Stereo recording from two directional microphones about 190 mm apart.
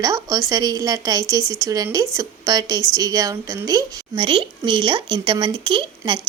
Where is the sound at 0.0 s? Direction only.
20° right (ahead or behind).